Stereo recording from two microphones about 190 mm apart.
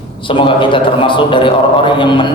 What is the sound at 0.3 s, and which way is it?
A man's voice, 25° left (ahead or behind).